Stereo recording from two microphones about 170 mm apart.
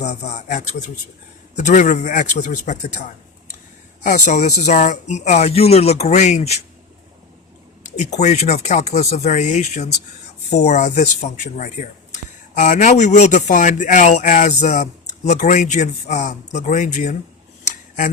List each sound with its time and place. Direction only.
0.0 s speech: 50° left (ahead or behind)
4.0 s speech: 45° left (ahead or behind)
7.9 s speech: 45° left (ahead or behind)